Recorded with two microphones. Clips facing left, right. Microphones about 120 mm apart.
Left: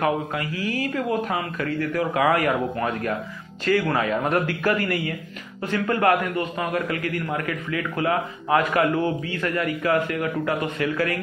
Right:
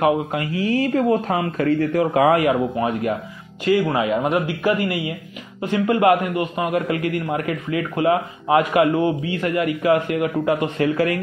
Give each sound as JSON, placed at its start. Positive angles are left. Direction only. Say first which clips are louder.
{"t": 0.0, "sound": "a man's voice", "louder": "right 5 dB", "side_deg": -25}